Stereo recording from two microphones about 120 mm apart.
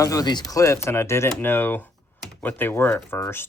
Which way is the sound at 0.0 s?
30° left (ahead or behind).